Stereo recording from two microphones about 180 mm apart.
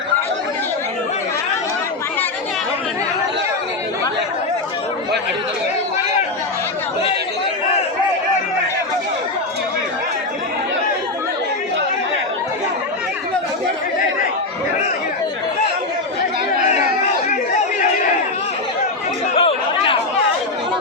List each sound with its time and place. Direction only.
19.4 s chatter: 30° left (ahead or behind)